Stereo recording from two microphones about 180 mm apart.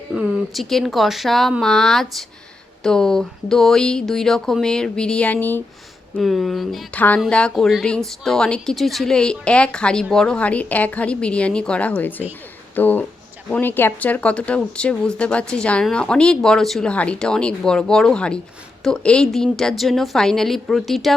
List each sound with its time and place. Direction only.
0.1 s speech: centre (ahead or behind)
6.1 s speech: centre (ahead or behind)